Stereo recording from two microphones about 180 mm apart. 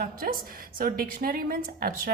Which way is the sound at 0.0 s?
55° right (ahead or behind).